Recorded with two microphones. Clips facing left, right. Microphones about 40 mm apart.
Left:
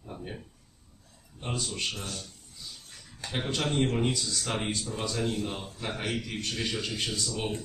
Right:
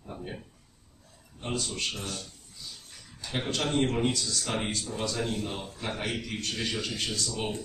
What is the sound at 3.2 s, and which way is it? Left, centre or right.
Speech, left.